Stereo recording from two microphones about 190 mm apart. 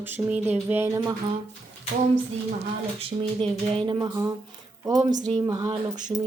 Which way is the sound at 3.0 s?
30° right (ahead or behind).